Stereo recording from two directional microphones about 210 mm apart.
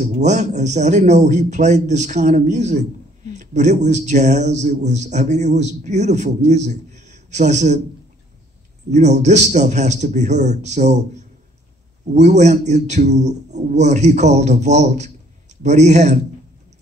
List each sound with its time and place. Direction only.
0.0 s a man's voice: 35° right (ahead or behind)
8.9 s a man's voice: 35° right (ahead or behind)